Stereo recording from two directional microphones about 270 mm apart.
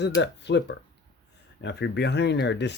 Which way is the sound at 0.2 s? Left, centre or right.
Left.